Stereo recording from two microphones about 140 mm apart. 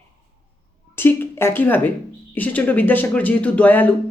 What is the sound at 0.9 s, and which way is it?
Speech, 15° left (ahead or behind).